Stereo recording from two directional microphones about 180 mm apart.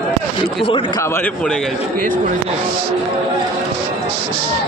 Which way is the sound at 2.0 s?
50° right (ahead or behind).